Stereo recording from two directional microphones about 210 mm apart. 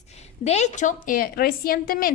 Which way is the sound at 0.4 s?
35° left (ahead or behind).